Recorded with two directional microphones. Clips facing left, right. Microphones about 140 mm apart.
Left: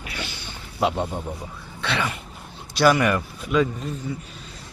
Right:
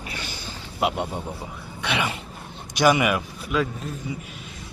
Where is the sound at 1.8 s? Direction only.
15° right (ahead or behind); by 3.9 s centre (ahead or behind).